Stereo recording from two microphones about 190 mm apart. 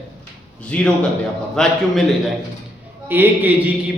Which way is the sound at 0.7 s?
5° left (ahead or behind).